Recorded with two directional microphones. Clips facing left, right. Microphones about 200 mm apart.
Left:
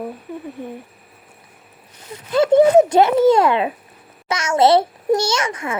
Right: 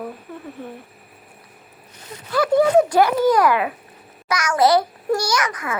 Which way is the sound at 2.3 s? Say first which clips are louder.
Left 4 dB; 25° left (ahead or behind).